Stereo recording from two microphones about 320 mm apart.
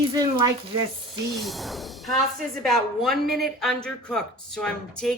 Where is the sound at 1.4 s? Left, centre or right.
Centre.